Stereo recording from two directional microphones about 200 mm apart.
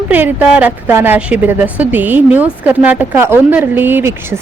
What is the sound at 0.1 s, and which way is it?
A woman's voice, 10° right (ahead or behind).